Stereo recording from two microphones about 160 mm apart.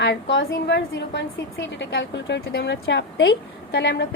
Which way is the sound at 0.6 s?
90° left.